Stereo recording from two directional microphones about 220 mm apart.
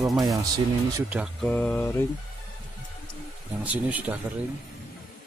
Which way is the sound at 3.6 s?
5° right (ahead or behind).